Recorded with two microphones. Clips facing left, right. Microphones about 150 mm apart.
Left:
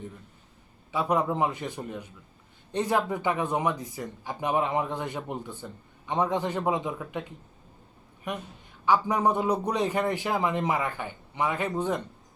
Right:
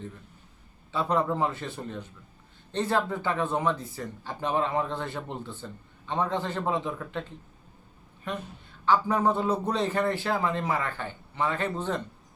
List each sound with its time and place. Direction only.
0.9 s speech: 15° left (ahead or behind)